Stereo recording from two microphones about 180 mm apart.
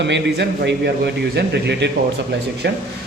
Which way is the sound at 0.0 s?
75° right (ahead or behind).